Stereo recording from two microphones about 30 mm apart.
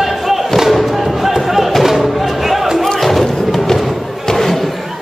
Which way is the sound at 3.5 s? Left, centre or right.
Centre.